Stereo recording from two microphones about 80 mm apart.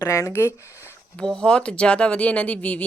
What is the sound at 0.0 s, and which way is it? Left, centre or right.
Speech, left.